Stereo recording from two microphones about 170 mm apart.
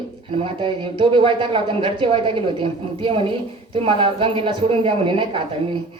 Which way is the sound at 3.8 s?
30° right (ahead or behind).